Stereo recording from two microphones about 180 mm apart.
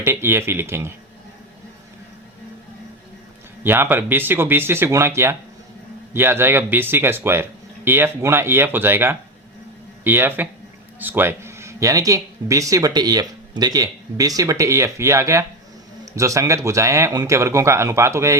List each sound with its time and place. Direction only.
0.0 s speech: 15° right (ahead or behind)
3.6 s speech: 10° right (ahead or behind)